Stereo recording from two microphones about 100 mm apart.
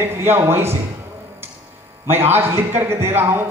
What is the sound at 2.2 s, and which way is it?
Speech, 20° right (ahead or behind).